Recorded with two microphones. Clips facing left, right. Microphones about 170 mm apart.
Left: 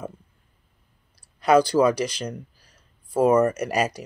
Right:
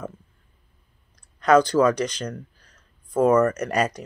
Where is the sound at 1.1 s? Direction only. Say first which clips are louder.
Right 1 dB; 10° left (ahead or behind).